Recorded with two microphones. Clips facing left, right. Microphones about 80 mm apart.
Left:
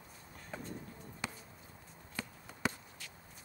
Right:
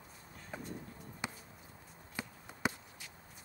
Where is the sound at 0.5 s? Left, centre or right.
Centre.